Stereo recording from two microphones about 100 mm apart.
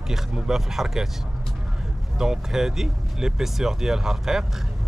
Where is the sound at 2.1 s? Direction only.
5° right (ahead or behind).